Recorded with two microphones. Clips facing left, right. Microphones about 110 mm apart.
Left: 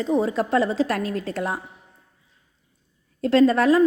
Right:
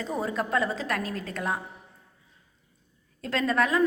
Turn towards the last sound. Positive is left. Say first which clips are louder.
# left 8 dB
turn(degrees=30)  # may be behind; listen again after turning